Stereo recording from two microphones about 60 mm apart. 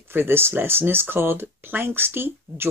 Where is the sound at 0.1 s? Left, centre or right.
Right.